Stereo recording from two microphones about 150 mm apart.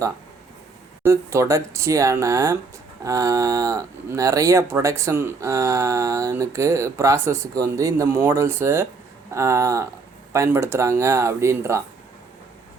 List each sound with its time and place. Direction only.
1.0 s speech: 20° right (ahead or behind)